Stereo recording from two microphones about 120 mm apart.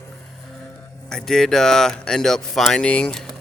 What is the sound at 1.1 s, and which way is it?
Speech, 5° left (ahead or behind).